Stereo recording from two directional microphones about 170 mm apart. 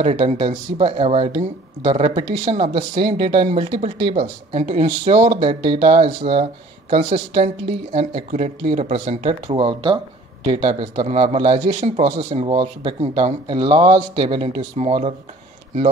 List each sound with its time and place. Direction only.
0.0 s a man's voice: 35° right (ahead or behind)
9.2 s a man's voice: 30° right (ahead or behind)